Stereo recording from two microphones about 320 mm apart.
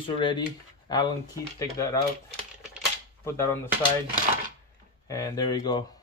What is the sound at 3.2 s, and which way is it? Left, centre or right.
Speech, centre.